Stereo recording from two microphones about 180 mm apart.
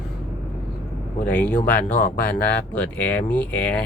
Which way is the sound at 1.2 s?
5° left (ahead or behind).